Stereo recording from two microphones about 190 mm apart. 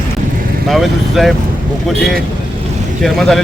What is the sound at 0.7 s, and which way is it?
Speech, centre (ahead or behind).